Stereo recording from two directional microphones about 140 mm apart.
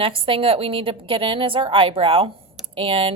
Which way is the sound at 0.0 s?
40° right (ahead or behind).